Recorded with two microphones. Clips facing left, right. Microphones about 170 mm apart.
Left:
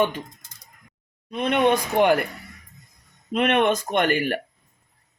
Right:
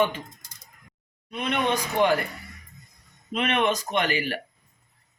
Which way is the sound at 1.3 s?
50° left (ahead or behind).